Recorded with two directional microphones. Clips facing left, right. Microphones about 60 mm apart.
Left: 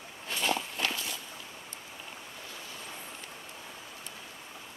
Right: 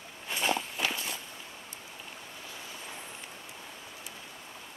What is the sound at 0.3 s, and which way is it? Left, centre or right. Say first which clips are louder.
Walk: right 1 dB; centre.